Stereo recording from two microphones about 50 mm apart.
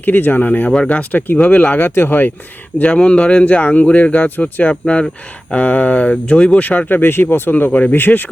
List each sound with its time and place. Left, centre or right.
0.0 s speech: left
2.9 s speech: centre; by 4.7 s left
4.7 s speech: left
6.6 s speech: left
7.7 s speech: left